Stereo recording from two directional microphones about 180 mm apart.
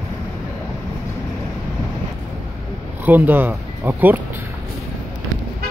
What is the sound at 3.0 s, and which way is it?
Speech, 10° right (ahead or behind).